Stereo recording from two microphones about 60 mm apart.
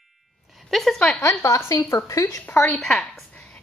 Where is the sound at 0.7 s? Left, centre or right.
Centre.